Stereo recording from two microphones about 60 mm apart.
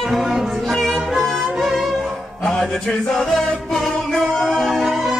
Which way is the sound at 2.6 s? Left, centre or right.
Centre.